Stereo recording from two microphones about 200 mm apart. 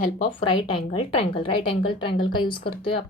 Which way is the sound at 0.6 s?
25° left (ahead or behind).